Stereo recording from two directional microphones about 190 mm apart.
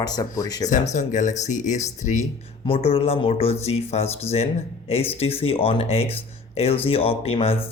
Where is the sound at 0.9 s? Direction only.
40° left (ahead or behind).